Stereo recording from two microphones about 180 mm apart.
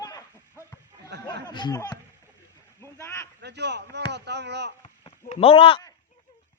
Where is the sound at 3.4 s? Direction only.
70° right (ahead or behind).